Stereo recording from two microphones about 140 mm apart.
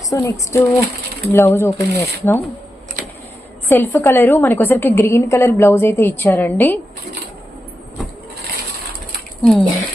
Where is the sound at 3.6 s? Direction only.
15° left (ahead or behind).